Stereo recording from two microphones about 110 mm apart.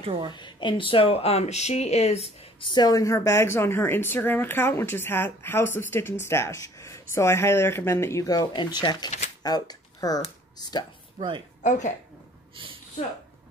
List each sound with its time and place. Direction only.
0.0 s a woman's voice: 55° right (ahead or behind)
0.3 s speech: 45° left (ahead or behind); by 2.3 s 70° left (ahead or behind)
2.6 s a woman's voice: 40° left (ahead or behind)
11.1 s a woman's voice: 45° right (ahead or behind)